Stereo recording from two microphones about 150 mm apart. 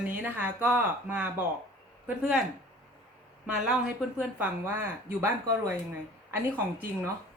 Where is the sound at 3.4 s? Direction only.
5° right (ahead or behind).